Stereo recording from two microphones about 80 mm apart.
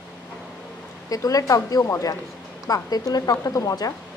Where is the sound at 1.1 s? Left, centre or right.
Left.